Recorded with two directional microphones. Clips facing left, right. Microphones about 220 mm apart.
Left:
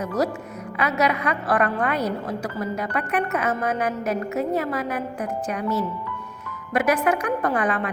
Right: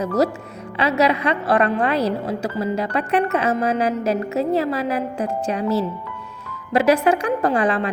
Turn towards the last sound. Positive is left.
turn(degrees=-30)  # may be behind; listen again after turning